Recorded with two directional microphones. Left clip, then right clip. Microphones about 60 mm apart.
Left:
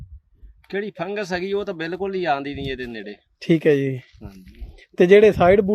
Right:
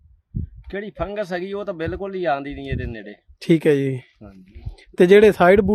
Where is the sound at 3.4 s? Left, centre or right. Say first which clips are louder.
Even; right.